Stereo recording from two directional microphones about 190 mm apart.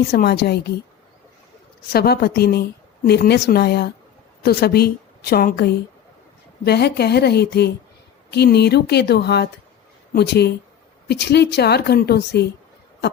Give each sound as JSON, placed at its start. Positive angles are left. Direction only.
{"t": 0.1, "sound": "a woman's voice", "side_deg": 60}
{"t": 1.9, "sound": "a woman's voice", "side_deg": 55}